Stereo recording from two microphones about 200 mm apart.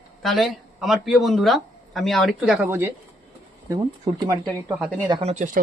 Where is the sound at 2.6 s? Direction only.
10° right (ahead or behind).